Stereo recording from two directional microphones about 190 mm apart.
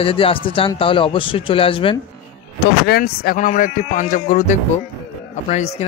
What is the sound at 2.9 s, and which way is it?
Speech, 50° left (ahead or behind).